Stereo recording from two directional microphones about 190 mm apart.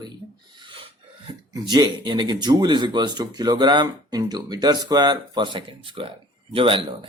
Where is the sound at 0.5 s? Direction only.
25° right (ahead or behind).